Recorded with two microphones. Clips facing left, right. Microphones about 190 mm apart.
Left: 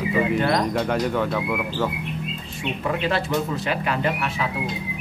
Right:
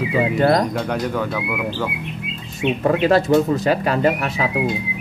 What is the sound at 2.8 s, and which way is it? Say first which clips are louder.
Speech: right 8 dB; 40° right (ahead or behind).